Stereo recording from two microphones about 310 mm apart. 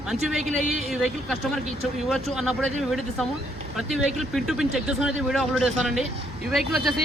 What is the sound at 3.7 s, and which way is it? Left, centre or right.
A man's voice, centre.